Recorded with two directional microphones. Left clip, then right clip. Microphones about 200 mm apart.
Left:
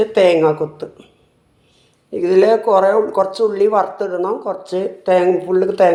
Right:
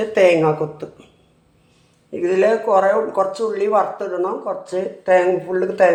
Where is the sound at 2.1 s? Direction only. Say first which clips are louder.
Left 4 dB; 40° left (ahead or behind).